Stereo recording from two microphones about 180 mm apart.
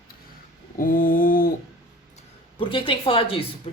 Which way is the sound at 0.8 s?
50° left (ahead or behind).